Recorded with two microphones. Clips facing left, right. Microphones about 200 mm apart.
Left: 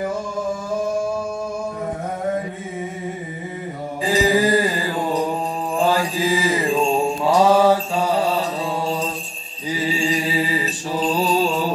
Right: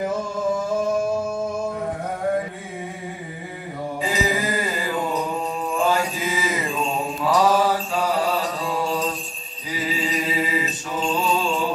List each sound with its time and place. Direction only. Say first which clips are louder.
4.0 s music: left 7 dB; 35° left (ahead or behind)
5.8 s mantra: left 3 dB; 35° left (ahead or behind)